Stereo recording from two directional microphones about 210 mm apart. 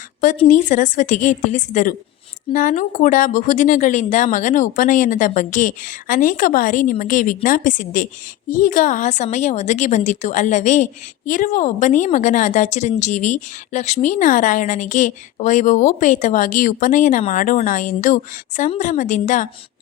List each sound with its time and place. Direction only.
0.3 s a woman's voice: 35° left (ahead or behind)